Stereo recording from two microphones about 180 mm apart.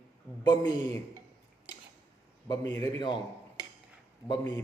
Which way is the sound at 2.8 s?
25° left (ahead or behind).